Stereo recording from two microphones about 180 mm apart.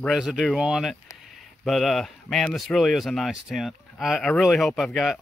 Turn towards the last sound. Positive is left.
turn(degrees=0)  # may be behind; listen again after turning